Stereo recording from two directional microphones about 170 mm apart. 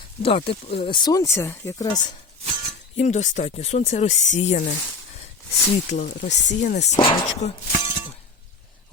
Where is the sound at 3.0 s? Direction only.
45° left (ahead or behind).